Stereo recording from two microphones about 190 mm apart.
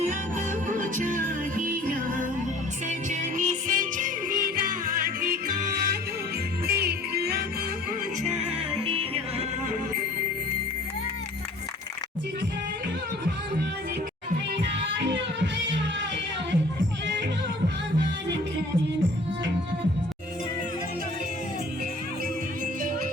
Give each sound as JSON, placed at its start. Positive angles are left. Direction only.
{"t": 0.0, "sound": "music", "side_deg": -45}
{"t": 8.3, "sound": "music", "side_deg": -35}
{"t": 15.0, "sound": "music", "side_deg": -70}